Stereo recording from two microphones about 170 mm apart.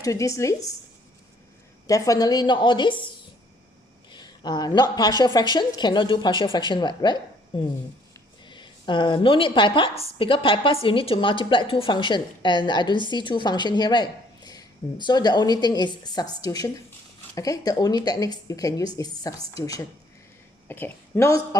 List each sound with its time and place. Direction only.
0.0 s a woman's voice: 20° left (ahead or behind)
1.9 s a woman's voice: 20° left (ahead or behind)
4.1 s a woman's voice: 25° left (ahead or behind)